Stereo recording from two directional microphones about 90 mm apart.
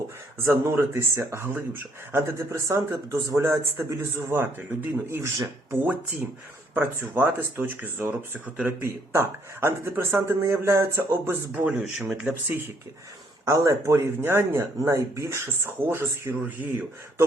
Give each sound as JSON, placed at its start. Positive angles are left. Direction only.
{"t": 0.4, "sound": "speech", "side_deg": -30}
{"t": 11.8, "sound": "speech", "side_deg": -5}
{"t": 12.3, "sound": "speech", "side_deg": -25}